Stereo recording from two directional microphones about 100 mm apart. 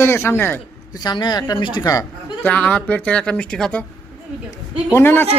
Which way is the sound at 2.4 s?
15° left (ahead or behind).